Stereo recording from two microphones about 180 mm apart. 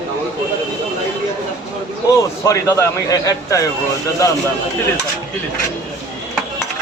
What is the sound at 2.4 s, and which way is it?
A man's voice, 15° left (ahead or behind).